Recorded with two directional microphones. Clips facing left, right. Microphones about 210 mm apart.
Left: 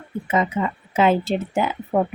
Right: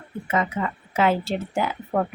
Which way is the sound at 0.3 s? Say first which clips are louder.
Left 3 dB; 20° left (ahead or behind).